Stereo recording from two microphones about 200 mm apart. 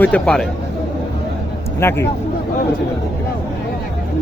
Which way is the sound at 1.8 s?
10° left (ahead or behind).